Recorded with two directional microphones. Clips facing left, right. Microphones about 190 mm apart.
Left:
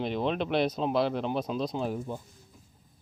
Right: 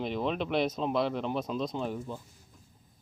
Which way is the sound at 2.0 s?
15° left (ahead or behind).